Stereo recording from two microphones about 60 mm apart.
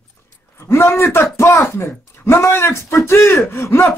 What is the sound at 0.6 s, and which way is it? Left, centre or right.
Speech, left.